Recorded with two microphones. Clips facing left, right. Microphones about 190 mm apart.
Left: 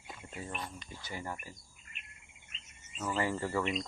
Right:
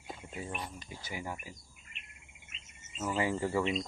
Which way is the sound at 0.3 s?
15° right (ahead or behind).